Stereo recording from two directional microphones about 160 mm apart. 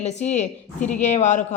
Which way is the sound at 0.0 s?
45° left (ahead or behind).